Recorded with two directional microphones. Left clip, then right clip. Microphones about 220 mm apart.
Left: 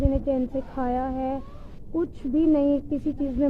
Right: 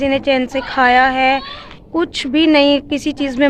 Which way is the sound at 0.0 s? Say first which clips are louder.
Right 11 dB; 25° right (ahead or behind).